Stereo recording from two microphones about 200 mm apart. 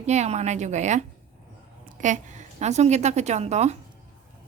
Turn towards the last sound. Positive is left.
turn(degrees=-35)  # may be behind; listen again after turning